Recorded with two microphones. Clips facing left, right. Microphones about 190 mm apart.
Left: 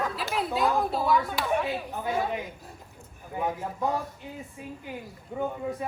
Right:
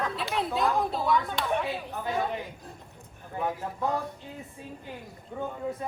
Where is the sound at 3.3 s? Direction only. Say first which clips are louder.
Left 1 dB; 20° left (ahead or behind).